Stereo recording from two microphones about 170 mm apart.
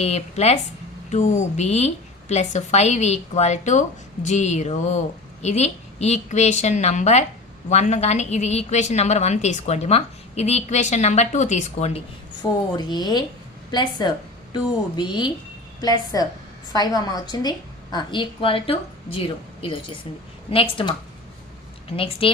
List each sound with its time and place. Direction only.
0.0 s a woman's voice: 40° left (ahead or behind)
12.4 s a woman's voice: 25° left (ahead or behind)
21.9 s a woman's voice: 35° left (ahead or behind)